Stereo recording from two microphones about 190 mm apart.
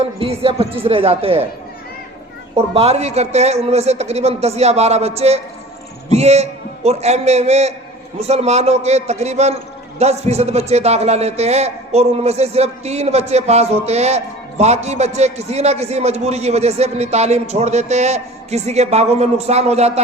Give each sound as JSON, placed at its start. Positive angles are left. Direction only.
{"t": 0.0, "sound": "a man's voice", "side_deg": -30}
{"t": 2.6, "sound": "a man's voice", "side_deg": -30}